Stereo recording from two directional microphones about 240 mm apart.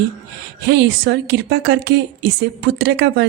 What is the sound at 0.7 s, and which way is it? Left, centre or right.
A woman's voice, right.